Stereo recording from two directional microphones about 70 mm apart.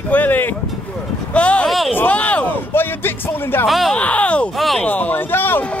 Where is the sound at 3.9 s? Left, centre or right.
Centre.